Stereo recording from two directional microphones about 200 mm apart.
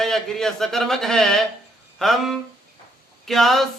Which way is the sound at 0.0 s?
Centre (ahead or behind).